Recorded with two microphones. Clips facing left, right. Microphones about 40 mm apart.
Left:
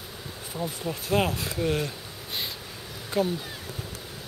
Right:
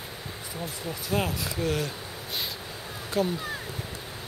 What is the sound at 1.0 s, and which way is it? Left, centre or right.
Speech, left.